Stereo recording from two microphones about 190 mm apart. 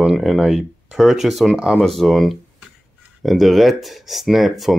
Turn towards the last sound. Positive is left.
turn(degrees=0)  # may be behind; listen again after turning